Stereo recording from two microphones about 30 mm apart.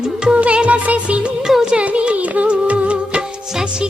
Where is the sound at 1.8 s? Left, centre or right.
Right.